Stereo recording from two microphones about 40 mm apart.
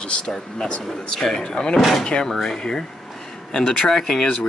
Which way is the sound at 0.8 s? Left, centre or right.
Centre.